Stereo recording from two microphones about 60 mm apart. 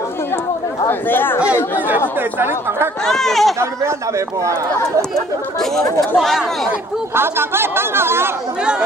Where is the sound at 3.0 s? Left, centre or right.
Centre.